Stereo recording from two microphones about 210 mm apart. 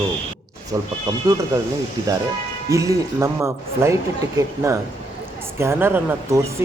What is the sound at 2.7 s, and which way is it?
Speech, 15° right (ahead or behind).